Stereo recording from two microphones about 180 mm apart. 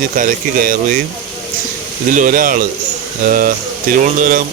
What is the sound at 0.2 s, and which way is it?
Speech, 50° right (ahead or behind).